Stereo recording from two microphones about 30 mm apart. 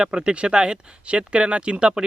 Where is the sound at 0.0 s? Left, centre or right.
Right.